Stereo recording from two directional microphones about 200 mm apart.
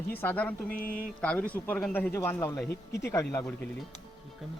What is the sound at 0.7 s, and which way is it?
Speech, 45° left (ahead or behind).